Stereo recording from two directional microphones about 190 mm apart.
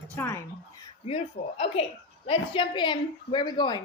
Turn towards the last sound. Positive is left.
turn(degrees=25)  # may be behind; listen again after turning